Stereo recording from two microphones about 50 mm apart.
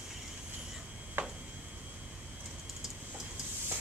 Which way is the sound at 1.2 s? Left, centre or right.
Right.